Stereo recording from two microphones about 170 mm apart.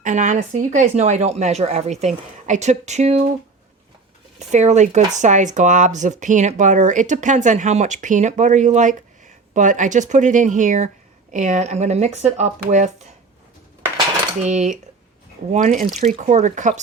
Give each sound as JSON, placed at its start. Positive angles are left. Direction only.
{"t": 0.0, "sound": "speech", "side_deg": -45}
{"t": 4.4, "sound": "speech", "side_deg": -40}
{"t": 14.4, "sound": "speech", "side_deg": -45}